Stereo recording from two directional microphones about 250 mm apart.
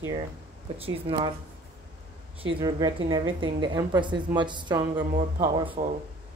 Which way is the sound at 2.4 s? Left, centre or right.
Right.